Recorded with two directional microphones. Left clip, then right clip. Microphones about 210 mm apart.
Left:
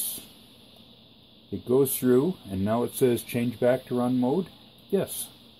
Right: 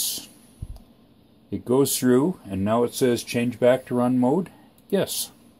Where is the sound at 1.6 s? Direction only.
25° right (ahead or behind); by 3.4 s 5° right (ahead or behind).